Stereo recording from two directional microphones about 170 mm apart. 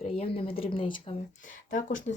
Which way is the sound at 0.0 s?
35° left (ahead or behind).